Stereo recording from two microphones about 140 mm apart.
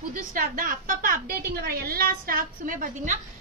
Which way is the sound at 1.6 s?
90° right.